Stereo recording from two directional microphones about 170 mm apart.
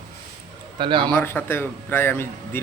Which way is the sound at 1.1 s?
10° left (ahead or behind).